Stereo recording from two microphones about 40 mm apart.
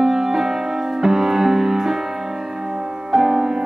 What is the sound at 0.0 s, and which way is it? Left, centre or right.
Music, centre.